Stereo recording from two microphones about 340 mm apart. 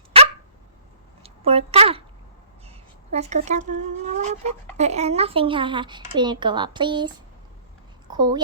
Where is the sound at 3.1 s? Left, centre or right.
Centre.